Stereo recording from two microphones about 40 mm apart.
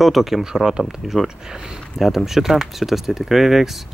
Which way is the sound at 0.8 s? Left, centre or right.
Centre.